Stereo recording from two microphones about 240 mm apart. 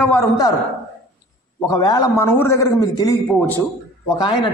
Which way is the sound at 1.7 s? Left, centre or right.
Centre.